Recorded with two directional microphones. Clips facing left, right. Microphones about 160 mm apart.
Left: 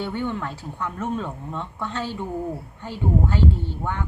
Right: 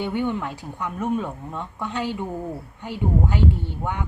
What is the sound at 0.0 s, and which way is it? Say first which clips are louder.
A woman's voice: right 2 dB; 15° right (ahead or behind).